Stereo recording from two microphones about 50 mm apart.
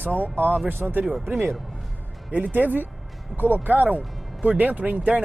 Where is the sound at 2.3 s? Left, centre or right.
Right.